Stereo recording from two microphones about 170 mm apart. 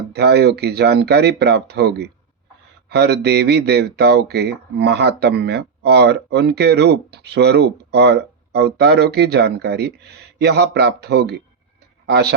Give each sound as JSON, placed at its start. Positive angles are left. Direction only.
{"t": 0.1, "sound": "speech", "side_deg": -75}